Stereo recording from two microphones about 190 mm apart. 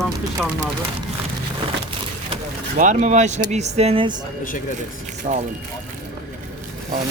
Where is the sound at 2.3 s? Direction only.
40° right (ahead or behind).